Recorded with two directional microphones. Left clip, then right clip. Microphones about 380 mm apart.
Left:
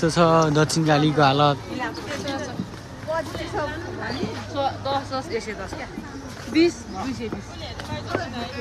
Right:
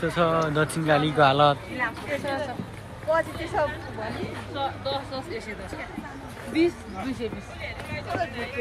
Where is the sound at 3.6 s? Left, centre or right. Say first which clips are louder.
Right 3 dB; centre.